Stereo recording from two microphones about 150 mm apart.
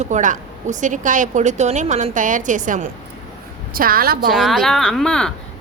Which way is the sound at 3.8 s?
75° right (ahead or behind).